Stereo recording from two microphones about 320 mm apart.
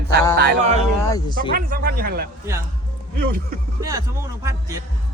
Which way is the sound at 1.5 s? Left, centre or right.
Right.